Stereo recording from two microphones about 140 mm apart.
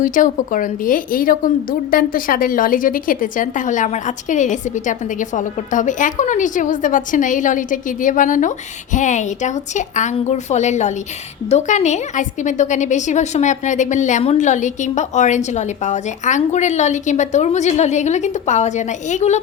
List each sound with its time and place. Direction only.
0.0 s a woman's voice: 70° left (ahead or behind)